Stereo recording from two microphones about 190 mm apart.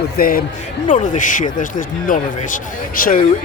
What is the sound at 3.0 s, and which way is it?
Speech, 50° left (ahead or behind).